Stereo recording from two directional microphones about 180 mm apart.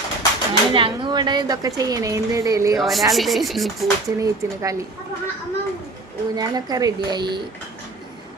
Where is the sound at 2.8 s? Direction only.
Centre (ahead or behind).